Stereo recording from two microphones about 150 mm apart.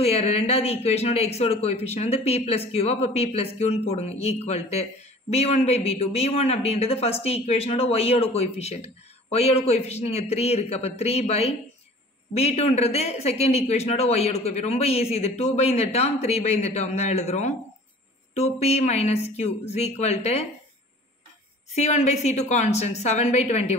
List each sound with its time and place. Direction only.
0.0 s speech: 45° left (ahead or behind)
21.7 s speech: 50° left (ahead or behind)